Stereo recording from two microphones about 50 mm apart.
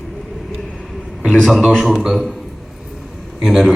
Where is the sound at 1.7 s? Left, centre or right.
Centre.